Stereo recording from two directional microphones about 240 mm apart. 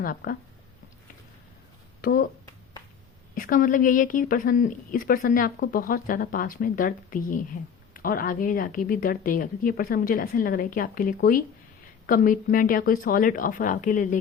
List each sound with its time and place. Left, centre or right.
0.0 s speech: left
2.0 s speech: left
3.3 s speech: left